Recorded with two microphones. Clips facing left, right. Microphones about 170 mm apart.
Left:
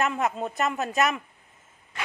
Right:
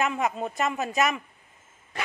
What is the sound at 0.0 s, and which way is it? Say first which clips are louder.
A woman's voice: even; centre (ahead or behind).